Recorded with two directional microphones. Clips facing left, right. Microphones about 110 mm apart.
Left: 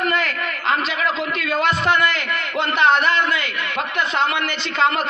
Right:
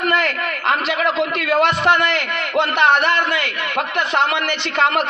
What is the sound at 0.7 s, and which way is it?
A man's voice, 65° right (ahead or behind).